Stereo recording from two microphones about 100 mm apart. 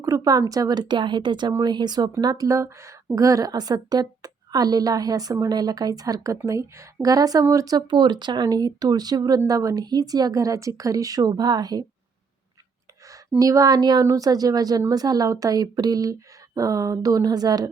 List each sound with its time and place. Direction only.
0.0 s a woman's voice: 35° right (ahead or behind)
13.4 s a woman's voice: 35° right (ahead or behind)